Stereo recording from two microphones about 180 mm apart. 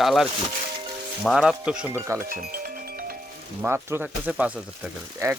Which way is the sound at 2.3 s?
55° right (ahead or behind).